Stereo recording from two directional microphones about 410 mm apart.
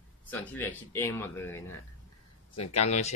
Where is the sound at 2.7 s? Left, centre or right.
Centre.